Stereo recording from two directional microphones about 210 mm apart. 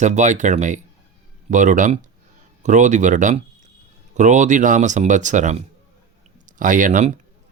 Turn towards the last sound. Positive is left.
turn(degrees=-35)  # may be behind; listen again after turning